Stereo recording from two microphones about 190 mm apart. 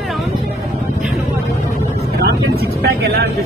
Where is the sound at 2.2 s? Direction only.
55° right (ahead or behind).